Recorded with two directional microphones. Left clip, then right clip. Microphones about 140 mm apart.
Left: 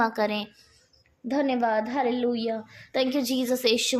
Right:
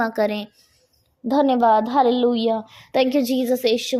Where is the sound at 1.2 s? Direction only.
45° right (ahead or behind); by 3.7 s 30° right (ahead or behind).